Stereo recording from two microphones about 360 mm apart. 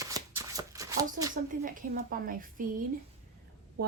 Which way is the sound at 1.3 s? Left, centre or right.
Right.